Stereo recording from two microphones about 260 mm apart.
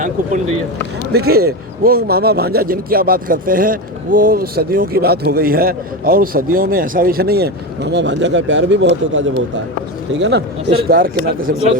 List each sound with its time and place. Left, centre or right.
1.1 s a man's voice: right